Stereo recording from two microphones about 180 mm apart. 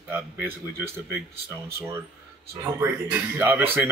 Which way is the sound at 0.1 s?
10° right (ahead or behind).